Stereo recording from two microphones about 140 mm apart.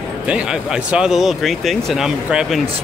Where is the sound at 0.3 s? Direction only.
5° right (ahead or behind).